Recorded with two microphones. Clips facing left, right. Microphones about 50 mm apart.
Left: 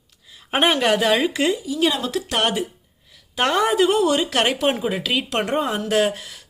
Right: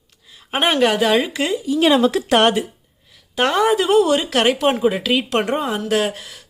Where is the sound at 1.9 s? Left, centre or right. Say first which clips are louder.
Right 9 dB; right.